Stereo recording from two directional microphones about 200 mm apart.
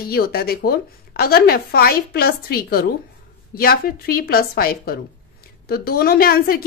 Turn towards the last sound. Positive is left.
turn(degrees=45)  # may be behind; listen again after turning